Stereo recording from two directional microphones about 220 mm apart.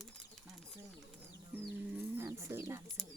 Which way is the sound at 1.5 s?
10° right (ahead or behind).